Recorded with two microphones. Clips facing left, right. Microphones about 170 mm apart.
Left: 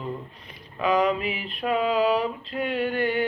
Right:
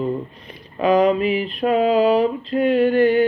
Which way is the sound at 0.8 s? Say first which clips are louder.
Right 7 dB; 40° right (ahead or behind).